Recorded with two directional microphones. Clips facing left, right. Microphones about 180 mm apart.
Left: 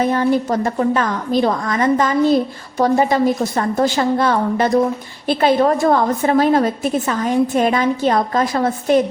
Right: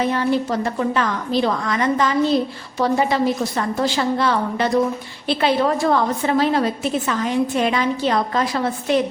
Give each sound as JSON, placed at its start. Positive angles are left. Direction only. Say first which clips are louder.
{"t": 0.0, "sound": "a woman's voice", "louder": "left 3 dB", "side_deg": 45}